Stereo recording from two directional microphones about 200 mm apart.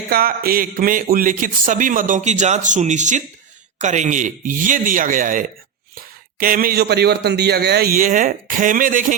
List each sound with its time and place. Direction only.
0.1 s a man's voice: 50° right (ahead or behind)